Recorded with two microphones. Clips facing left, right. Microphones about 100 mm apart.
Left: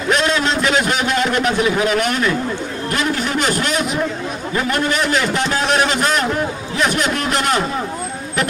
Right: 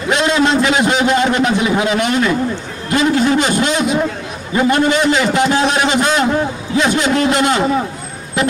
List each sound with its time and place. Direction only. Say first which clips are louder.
0.1 s a man's voice: right 4 dB; 15° right (ahead or behind)